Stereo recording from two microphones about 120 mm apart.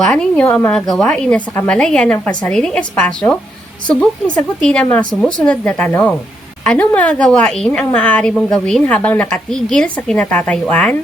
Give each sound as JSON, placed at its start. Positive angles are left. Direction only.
{"t": 0.0, "sound": "a woman's voice", "side_deg": 5}